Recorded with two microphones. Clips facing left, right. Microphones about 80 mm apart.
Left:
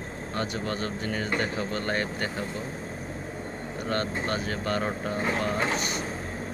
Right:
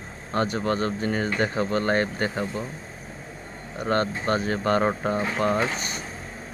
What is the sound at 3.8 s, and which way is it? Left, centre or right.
Speech, right.